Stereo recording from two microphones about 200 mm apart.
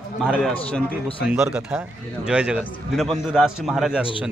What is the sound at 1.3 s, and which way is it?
A man's voice, 10° right (ahead or behind).